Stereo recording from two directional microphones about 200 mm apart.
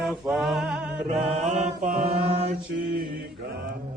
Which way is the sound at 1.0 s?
30° right (ahead or behind).